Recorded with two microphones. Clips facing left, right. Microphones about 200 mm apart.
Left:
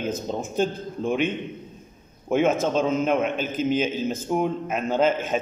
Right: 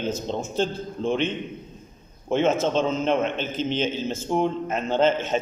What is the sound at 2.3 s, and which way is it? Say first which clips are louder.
A man's voice: even; 10° left (ahead or behind).